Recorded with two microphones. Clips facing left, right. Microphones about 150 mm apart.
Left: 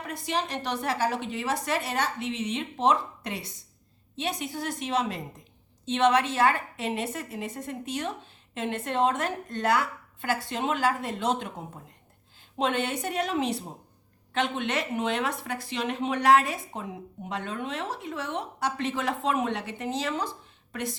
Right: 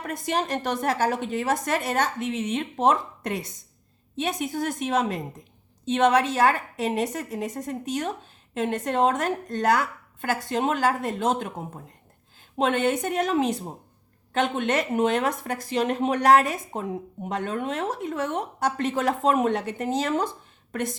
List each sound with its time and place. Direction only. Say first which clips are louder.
0.0 s speech: right 4 dB; 50° right (ahead or behind)